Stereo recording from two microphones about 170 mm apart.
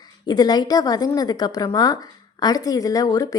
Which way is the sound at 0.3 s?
25° left (ahead or behind).